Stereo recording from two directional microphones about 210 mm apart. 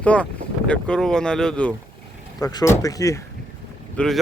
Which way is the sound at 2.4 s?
15° left (ahead or behind).